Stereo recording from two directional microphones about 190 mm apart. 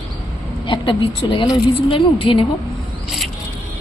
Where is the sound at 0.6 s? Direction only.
25° left (ahead or behind).